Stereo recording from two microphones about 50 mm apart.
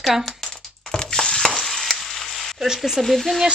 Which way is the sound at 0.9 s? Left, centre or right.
Centre.